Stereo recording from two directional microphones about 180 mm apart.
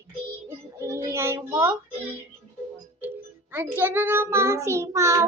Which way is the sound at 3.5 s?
15° right (ahead or behind).